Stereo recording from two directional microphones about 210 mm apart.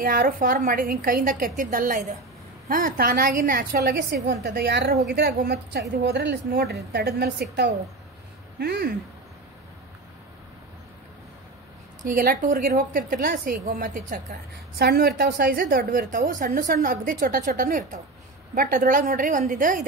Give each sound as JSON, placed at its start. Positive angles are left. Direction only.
{"t": 0.0, "sound": "a woman's voice", "side_deg": -45}
{"t": 12.2, "sound": "a woman's voice", "side_deg": -40}
{"t": 14.8, "sound": "a woman's voice", "side_deg": -50}